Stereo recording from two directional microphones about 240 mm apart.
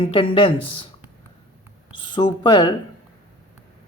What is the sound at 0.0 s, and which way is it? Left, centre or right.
Speech, left.